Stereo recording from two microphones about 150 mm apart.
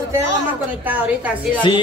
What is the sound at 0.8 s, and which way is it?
Speech, 10° right (ahead or behind).